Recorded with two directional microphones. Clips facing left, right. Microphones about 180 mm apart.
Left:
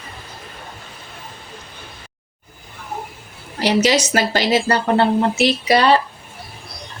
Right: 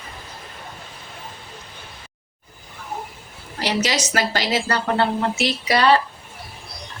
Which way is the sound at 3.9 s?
25° left (ahead or behind).